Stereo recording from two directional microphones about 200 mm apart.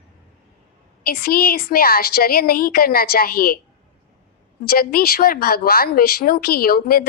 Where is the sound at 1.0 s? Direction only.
50° left (ahead or behind).